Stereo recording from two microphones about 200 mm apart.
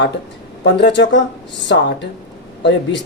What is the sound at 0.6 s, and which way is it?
Speech, 65° left (ahead or behind).